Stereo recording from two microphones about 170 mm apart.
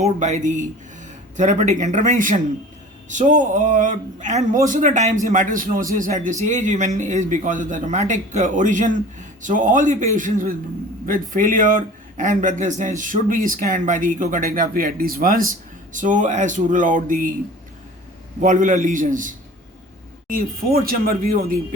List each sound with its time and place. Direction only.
0.0 s a man's voice: 45° right (ahead or behind)
18.3 s a man's voice: 45° right (ahead or behind)